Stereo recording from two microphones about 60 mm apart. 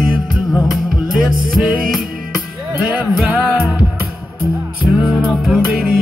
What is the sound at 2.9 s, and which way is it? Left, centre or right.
Music, right.